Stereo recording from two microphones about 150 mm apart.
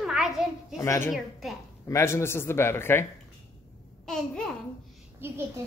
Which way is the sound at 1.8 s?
20° left (ahead or behind).